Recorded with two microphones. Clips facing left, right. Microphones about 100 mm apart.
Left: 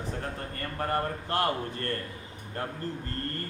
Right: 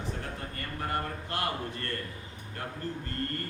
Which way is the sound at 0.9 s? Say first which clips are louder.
Left 6 dB; 40° left (ahead or behind).